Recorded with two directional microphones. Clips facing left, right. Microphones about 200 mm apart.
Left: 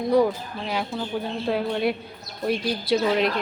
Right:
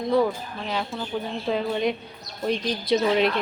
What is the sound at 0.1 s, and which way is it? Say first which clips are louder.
Speech: left 2 dB; 10° left (ahead or behind).